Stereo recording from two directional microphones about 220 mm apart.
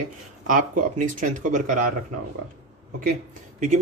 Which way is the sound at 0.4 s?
35° right (ahead or behind).